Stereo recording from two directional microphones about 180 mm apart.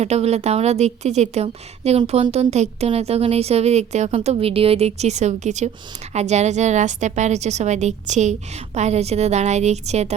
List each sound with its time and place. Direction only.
0.0 s a woman's voice: 35° right (ahead or behind)